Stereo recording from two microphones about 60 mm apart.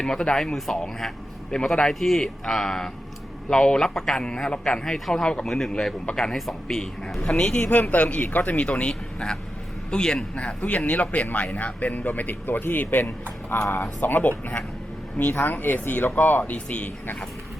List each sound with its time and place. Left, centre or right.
0.0 s speech: centre